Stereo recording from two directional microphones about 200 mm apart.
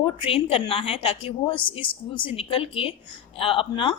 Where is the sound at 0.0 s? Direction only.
25° left (ahead or behind).